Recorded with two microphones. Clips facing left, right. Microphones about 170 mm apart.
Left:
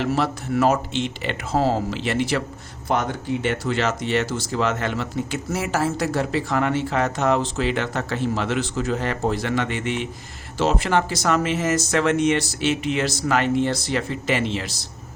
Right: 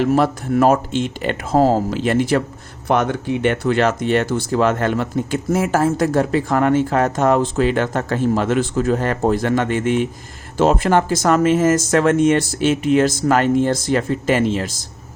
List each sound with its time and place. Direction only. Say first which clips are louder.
0.0 s speech: right 6 dB; 50° right (ahead or behind)
2.8 s speech: right 5 dB; 65° right (ahead or behind); by 14.8 s 45° right (ahead or behind)